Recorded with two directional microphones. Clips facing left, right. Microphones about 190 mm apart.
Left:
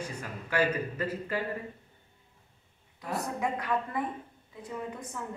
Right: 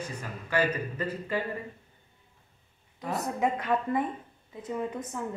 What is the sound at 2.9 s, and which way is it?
A woman's voice, 20° right (ahead or behind).